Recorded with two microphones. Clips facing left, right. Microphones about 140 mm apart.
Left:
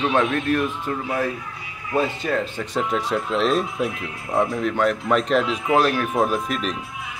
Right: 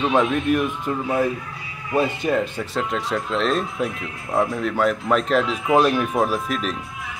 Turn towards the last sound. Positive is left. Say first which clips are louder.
# even
turn(degrees=0)  # may be behind; listen again after turning